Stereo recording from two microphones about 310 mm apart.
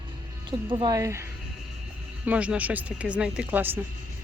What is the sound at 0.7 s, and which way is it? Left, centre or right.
Speech, centre.